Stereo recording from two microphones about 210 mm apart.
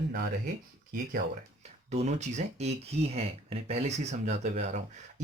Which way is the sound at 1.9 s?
30° right (ahead or behind).